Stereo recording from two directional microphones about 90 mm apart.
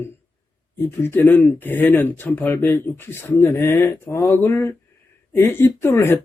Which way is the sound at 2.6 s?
35° left (ahead or behind).